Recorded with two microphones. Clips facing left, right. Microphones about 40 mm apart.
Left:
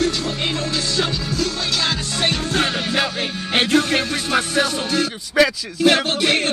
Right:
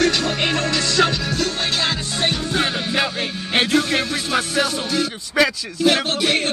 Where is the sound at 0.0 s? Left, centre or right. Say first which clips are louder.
Right 3 dB; right.